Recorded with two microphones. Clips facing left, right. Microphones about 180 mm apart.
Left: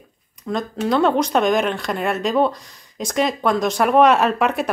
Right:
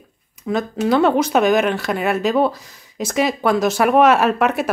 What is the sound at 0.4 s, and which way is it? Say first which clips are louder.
Speech: right 3 dB; 5° right (ahead or behind).